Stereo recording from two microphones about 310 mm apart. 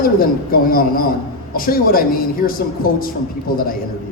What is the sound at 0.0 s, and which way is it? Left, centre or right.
Speech, left.